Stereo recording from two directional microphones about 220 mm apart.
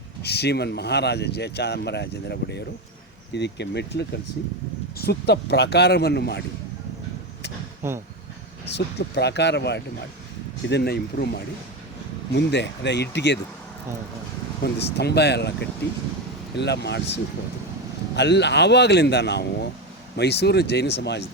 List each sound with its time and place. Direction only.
0.2 s speech: 50° left (ahead or behind)
7.8 s speech: 10° right (ahead or behind)
8.7 s speech: 50° left (ahead or behind)
14.6 s speech: 50° left (ahead or behind)
16.6 s speech: 50° left (ahead or behind)